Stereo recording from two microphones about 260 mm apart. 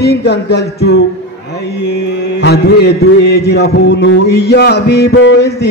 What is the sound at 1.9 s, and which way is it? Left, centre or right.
A man's voice, left.